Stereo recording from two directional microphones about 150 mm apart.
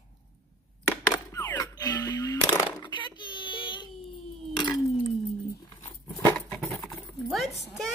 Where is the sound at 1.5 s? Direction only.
25° left (ahead or behind).